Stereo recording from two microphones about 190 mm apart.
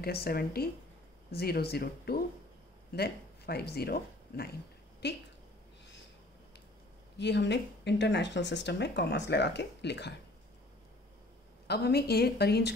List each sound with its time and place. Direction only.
0.0 s speech: 55° left (ahead or behind)
7.2 s speech: 65° left (ahead or behind)
11.6 s speech: 55° left (ahead or behind)